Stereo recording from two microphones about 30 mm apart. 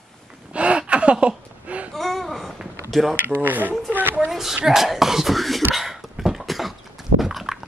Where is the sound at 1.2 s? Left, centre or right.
Right.